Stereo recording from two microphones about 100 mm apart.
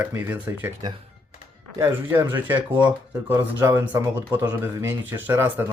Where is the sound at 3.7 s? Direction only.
20° right (ahead or behind).